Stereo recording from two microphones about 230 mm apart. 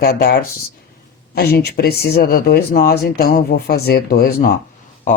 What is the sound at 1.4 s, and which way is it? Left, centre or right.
Speech, left.